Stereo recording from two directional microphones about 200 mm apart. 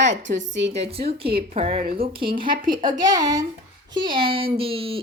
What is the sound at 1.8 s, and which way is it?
Speech, 50° right (ahead or behind).